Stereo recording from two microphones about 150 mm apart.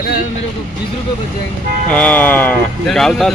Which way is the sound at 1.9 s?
10° left (ahead or behind).